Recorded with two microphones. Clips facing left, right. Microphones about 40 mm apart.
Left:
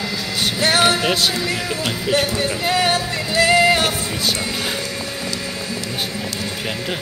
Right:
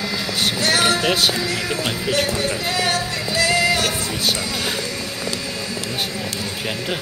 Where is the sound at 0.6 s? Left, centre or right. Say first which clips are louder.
Left 3 dB; left.